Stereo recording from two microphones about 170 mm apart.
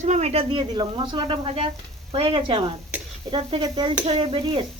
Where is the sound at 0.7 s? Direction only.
25° right (ahead or behind).